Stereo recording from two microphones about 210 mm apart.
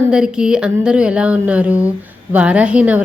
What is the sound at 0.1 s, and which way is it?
A woman's voice, 5° right (ahead or behind).